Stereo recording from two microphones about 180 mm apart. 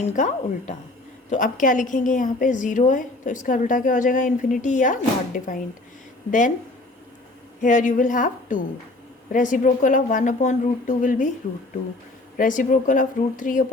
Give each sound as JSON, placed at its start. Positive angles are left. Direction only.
{"t": 0.0, "sound": "a woman's voice", "side_deg": 40}
{"t": 7.6, "sound": "a woman's voice", "side_deg": 45}
{"t": 12.4, "sound": "a woman's voice", "side_deg": 45}